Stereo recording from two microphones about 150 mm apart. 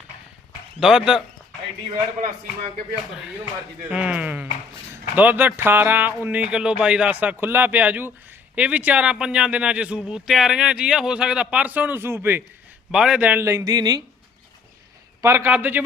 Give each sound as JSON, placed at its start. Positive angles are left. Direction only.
{"t": 0.8, "sound": "a man's voice", "side_deg": -5}
{"t": 3.8, "sound": "speech", "side_deg": -10}
{"t": 15.2, "sound": "speech", "side_deg": -15}